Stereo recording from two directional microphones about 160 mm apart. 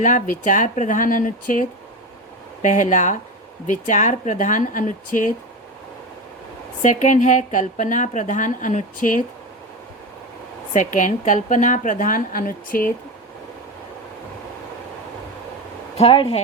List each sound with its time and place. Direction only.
0.0 s a woman's voice: 55° left (ahead or behind)
6.8 s a woman's voice: 50° left (ahead or behind)
10.8 s a woman's voice: 50° left (ahead or behind)
16.0 s speech: 35° left (ahead or behind)